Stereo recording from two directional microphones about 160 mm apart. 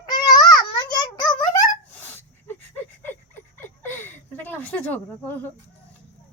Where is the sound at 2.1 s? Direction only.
15° left (ahead or behind).